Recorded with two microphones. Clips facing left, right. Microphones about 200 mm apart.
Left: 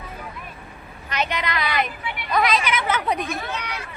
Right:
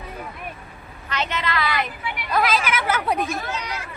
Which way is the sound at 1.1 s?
15° left (ahead or behind).